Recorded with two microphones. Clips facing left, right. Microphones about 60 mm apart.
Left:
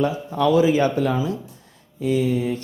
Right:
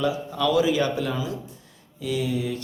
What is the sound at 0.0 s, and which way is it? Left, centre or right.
Speech, left.